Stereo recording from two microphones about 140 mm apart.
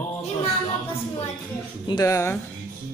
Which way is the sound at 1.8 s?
25° left (ahead or behind).